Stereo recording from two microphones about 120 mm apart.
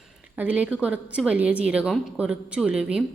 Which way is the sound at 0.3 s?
10° right (ahead or behind).